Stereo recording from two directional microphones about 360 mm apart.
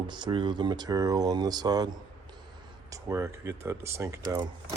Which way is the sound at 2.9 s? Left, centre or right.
Centre.